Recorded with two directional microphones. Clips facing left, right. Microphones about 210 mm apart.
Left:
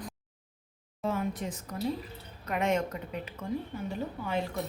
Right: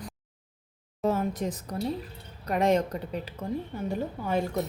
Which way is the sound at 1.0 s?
40° right (ahead or behind).